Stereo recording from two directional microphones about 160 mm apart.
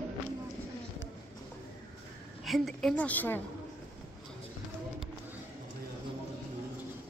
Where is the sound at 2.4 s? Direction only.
Centre (ahead or behind).